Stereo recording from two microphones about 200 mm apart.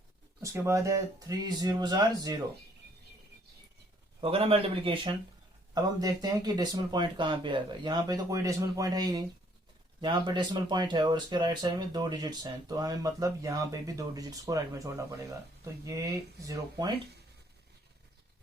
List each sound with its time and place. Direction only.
0.4 s speech: 15° right (ahead or behind)
4.2 s speech: 30° right (ahead or behind)